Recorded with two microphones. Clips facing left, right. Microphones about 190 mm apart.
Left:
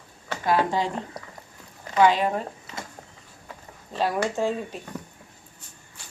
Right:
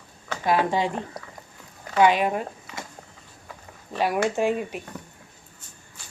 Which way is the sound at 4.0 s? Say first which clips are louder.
Right 2 dB; 15° right (ahead or behind).